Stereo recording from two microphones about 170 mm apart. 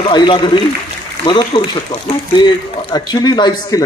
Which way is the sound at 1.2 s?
30° left (ahead or behind).